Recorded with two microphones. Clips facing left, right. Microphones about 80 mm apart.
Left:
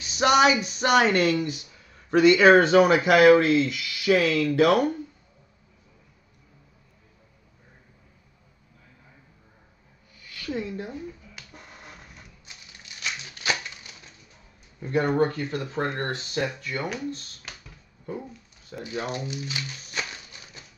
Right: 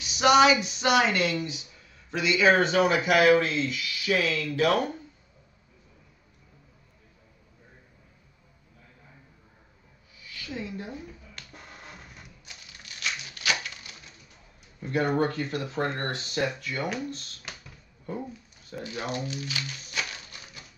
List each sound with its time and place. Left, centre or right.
0.4 s speech: left
10.1 s a sound: left
11.4 s music: centre
12.4 s crumpling: left
14.8 s speech: left
18.7 s speech: left